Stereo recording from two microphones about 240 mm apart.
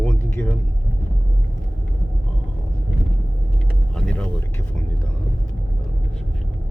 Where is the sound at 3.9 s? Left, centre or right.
Centre.